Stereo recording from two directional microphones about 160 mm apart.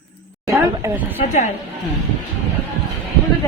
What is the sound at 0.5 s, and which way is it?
Speech, 15° right (ahead or behind).